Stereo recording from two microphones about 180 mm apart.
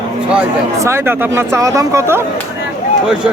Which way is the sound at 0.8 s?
15° right (ahead or behind).